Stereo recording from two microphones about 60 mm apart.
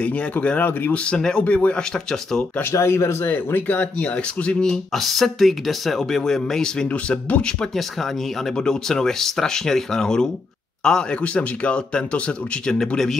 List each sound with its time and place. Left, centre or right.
0.0 s speech: left
2.7 s speech: left; by 4.7 s centre
4.9 s speech: centre
6.9 s speech: left
8.5 s speech: centre